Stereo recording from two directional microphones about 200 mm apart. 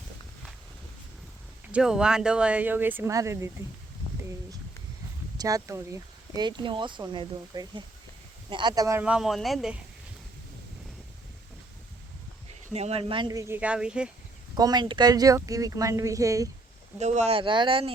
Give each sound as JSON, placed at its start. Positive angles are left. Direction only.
{"t": 1.7, "sound": "speech", "side_deg": -5}
{"t": 5.4, "sound": "speech", "side_deg": -15}
{"t": 12.7, "sound": "speech", "side_deg": -30}
{"t": 14.5, "sound": "speech", "side_deg": -20}
{"t": 17.0, "sound": "speech", "side_deg": -35}